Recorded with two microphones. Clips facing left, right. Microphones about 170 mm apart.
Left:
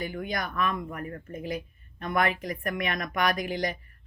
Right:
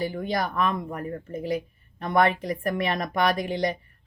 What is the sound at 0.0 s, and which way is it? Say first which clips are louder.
Speech: right 5 dB; 35° right (ahead or behind).